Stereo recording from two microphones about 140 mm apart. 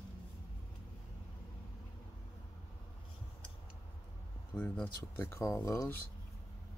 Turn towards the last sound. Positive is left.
turn(degrees=20)  # may be behind; listen again after turning